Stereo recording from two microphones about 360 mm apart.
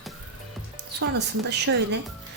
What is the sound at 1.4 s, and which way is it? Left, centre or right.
Speech, right.